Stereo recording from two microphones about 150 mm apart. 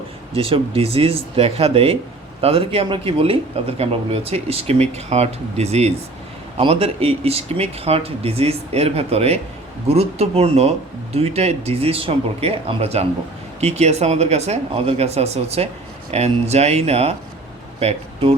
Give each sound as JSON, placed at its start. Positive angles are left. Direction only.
{"t": 0.3, "sound": "speech", "side_deg": -40}